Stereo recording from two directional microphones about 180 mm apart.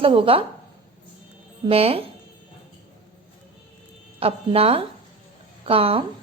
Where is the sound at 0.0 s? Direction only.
30° right (ahead or behind).